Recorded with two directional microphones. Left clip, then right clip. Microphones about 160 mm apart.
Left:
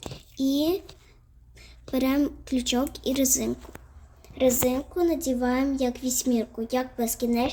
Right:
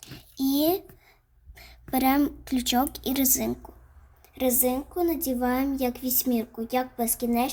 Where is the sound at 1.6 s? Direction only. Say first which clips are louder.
Right 1 dB; 40° right (ahead or behind).